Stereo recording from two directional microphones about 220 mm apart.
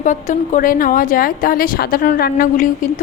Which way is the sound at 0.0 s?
35° left (ahead or behind).